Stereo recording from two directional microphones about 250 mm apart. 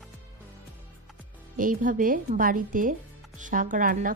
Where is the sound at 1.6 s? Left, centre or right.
Right.